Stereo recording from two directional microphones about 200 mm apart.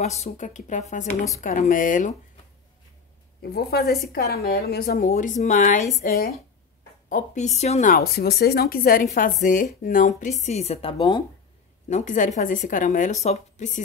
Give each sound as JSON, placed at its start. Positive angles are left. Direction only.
{"t": 0.0, "sound": "a woman's voice", "side_deg": 35}
{"t": 3.5, "sound": "a woman's voice", "side_deg": 50}
{"t": 11.9, "sound": "a woman's voice", "side_deg": 40}